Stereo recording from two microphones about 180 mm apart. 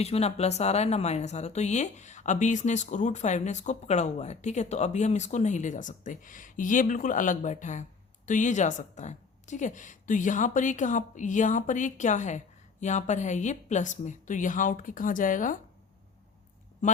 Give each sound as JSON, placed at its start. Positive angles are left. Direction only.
{"t": 0.0, "sound": "a woman's voice", "side_deg": 35}
{"t": 16.8, "sound": "speech", "side_deg": 45}